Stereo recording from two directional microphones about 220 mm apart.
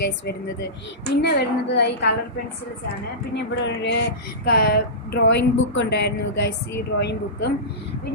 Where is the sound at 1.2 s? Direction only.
50° left (ahead or behind).